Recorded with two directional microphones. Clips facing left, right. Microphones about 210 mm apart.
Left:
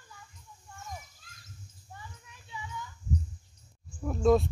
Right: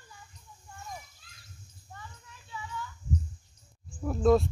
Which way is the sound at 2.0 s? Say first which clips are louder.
Right 1 dB; 15° left (ahead or behind).